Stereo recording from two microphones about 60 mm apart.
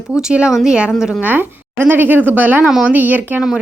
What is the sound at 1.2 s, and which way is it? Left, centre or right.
Speech, right.